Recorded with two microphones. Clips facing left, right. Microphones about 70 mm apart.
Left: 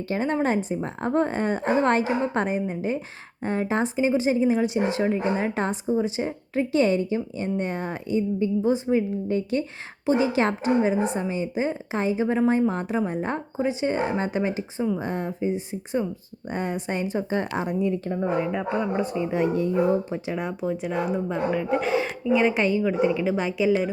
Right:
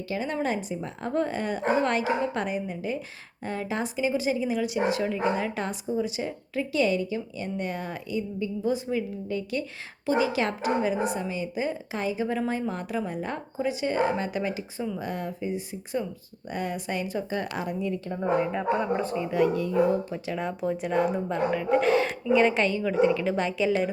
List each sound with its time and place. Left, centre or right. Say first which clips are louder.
0.1 s speech: left 5 dB; left
18.2 s a woman's voice: right 2 dB; centre
19.3 s speech: right 1 dB; left
20.4 s speech: left 1 dB; centre